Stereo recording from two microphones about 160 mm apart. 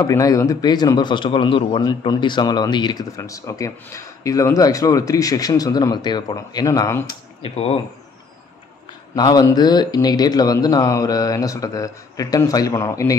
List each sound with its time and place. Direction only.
0.0 s speech: 20° left (ahead or behind)
7.4 s speech: 35° left (ahead or behind)
9.1 s speech: 25° left (ahead or behind)